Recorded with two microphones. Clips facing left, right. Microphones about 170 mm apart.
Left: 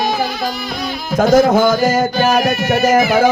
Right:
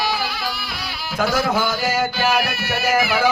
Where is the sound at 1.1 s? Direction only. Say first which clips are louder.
Left 10 dB; 45° left (ahead or behind).